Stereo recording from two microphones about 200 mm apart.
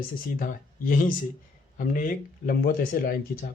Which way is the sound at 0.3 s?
45° left (ahead or behind).